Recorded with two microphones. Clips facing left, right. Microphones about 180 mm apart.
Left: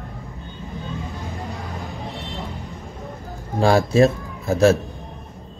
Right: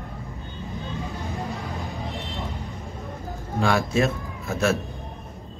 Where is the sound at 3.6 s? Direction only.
35° left (ahead or behind).